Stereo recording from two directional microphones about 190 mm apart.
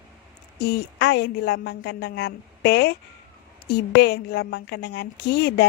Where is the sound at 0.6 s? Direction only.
60° left (ahead or behind).